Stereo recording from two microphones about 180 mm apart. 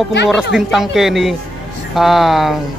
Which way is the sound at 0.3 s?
5° right (ahead or behind).